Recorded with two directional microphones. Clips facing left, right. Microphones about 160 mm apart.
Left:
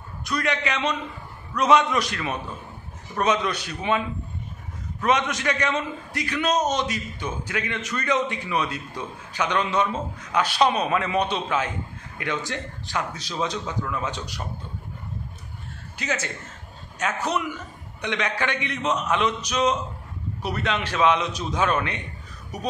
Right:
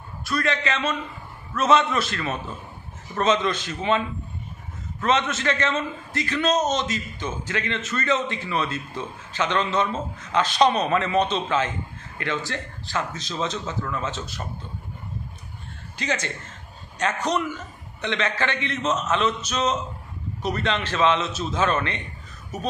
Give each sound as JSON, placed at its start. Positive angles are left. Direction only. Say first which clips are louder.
{"t": 0.2, "sound": "a man's voice", "louder": "right 1 dB", "side_deg": 15}
{"t": 5.0, "sound": "a man's voice", "louder": "even", "side_deg": 15}
{"t": 16.0, "sound": "a man's voice", "louder": "right 1 dB", "side_deg": 10}